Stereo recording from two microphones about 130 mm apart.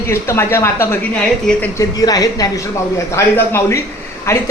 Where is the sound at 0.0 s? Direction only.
20° left (ahead or behind).